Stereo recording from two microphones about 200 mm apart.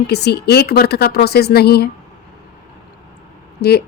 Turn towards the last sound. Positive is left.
turn(degrees=55)  # may be behind; listen again after turning